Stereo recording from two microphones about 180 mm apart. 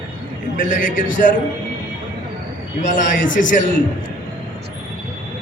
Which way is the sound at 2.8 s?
45° left (ahead or behind).